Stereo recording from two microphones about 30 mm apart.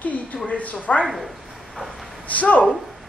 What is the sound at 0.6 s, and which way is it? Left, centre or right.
Speech, left.